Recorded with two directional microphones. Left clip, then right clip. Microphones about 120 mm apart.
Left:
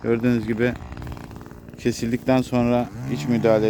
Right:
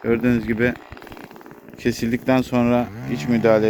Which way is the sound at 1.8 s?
15° left (ahead or behind).